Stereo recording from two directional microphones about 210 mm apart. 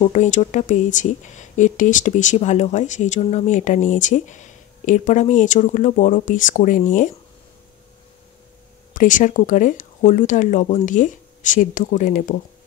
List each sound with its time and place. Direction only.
0.0 s speech: 35° left (ahead or behind)
8.9 s speech: 40° left (ahead or behind)